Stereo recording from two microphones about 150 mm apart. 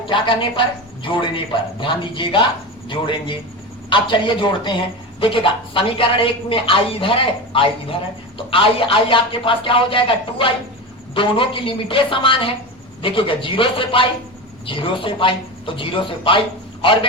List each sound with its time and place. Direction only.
0.0 s a woman's voice: 35° left (ahead or behind)